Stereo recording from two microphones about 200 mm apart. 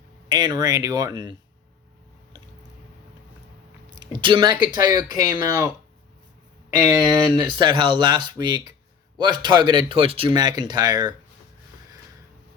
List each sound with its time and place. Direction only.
0.3 s speech: 20° right (ahead or behind)
3.9 s a sound: 20° right (ahead or behind)
4.8 s speech: 20° right (ahead or behind)
6.8 s speech: 20° right (ahead or behind)